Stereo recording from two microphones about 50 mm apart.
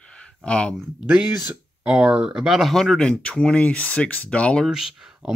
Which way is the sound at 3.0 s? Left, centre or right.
Left.